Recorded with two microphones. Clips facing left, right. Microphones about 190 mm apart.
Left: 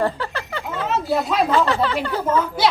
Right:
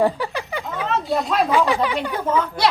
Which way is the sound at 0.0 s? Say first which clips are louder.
Right 3 dB; 15° right (ahead or behind).